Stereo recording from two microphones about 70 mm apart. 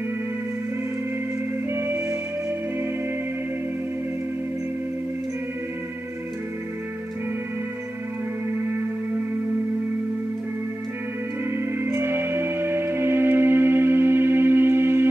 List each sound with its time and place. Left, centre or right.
1.7 s music: right
11.5 s music: right